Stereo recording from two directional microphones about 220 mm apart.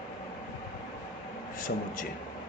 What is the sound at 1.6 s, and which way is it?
Speech, 35° left (ahead or behind).